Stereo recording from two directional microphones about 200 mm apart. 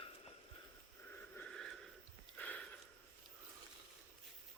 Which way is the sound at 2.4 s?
5° left (ahead or behind).